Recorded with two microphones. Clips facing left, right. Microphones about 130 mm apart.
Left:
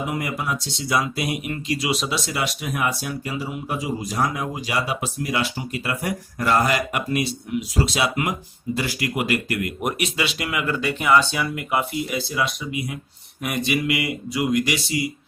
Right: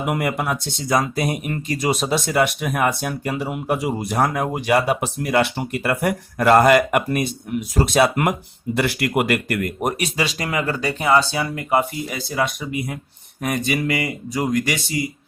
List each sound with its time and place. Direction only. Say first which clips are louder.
0.0 s speech: right 4 dB; 60° right (ahead or behind)